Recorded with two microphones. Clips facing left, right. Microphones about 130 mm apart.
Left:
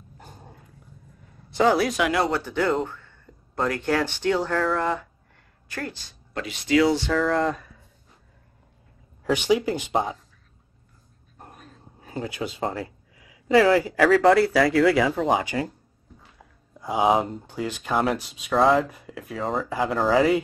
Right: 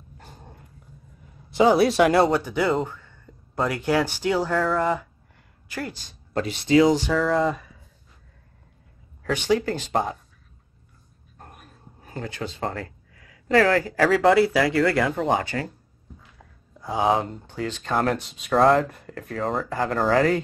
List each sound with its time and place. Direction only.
0.3 s dog: 5° left (ahead or behind)
1.5 s speech: 10° right (ahead or behind)
1.8 s speech: 30° right (ahead or behind)
2.3 s speech: 10° right (ahead or behind)
5.7 s speech: 15° right (ahead or behind)
6.3 s speech: 35° right (ahead or behind)
6.9 s speech: 15° right (ahead or behind)
7.2 s speech: centre (ahead or behind)
9.2 s speech: 15° left (ahead or behind)
11.5 s a sound: 10° right (ahead or behind)
12.1 s speech: 10° left (ahead or behind)
15.4 s speech: 15° left (ahead or behind)